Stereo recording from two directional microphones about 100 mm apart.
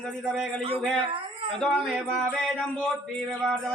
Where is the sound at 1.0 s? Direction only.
65° right (ahead or behind).